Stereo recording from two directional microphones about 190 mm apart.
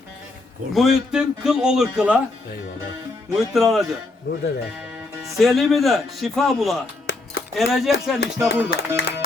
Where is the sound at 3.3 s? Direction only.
Centre (ahead or behind).